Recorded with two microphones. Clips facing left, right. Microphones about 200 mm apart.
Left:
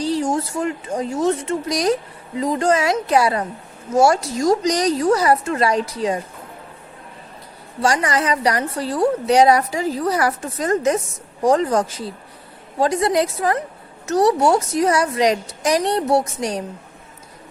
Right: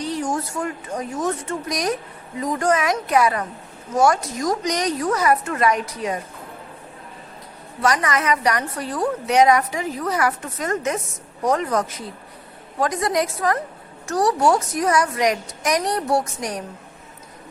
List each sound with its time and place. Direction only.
0.0 s a woman's voice: 30° left (ahead or behind)
7.8 s a woman's voice: 30° left (ahead or behind)